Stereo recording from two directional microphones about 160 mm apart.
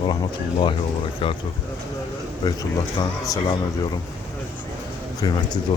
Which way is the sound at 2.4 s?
25° left (ahead or behind).